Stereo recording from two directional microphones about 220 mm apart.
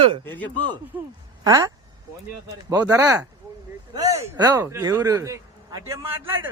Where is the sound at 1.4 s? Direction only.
15° right (ahead or behind).